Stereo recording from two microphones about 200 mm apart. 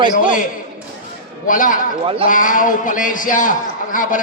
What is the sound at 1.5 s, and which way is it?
A man's voice, 40° left (ahead or behind).